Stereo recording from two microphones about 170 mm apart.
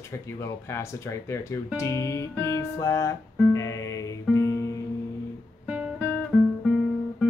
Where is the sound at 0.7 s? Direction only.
15° left (ahead or behind).